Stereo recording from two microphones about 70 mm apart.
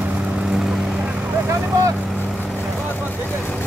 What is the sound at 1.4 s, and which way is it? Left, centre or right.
Vehicle, right.